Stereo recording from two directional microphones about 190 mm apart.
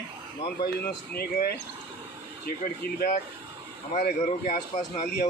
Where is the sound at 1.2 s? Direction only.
55° left (ahead or behind).